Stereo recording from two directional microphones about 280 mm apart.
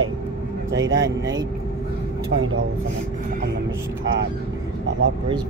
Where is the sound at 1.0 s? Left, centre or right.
Centre.